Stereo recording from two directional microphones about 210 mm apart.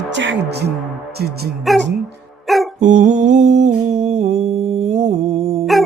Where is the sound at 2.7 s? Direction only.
35° right (ahead or behind).